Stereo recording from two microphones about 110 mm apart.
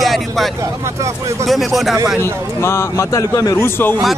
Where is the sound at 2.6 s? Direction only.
25° left (ahead or behind).